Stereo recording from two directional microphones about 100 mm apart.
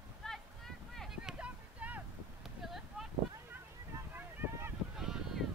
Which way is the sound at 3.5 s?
20° right (ahead or behind).